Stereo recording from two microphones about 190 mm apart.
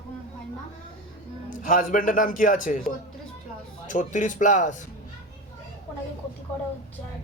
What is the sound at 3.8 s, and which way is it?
Speech, 40° left (ahead or behind).